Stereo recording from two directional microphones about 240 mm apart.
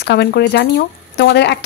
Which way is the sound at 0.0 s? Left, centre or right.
Left.